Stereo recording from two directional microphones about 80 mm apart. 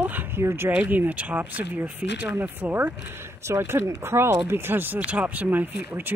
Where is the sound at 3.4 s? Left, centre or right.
Right.